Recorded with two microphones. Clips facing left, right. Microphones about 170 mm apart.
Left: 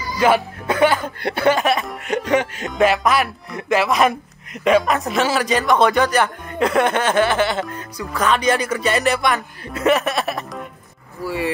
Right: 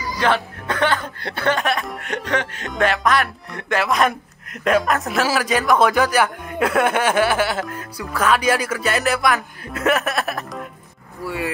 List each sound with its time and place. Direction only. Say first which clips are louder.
0.2 s speech: left 4 dB; 10° left (ahead or behind)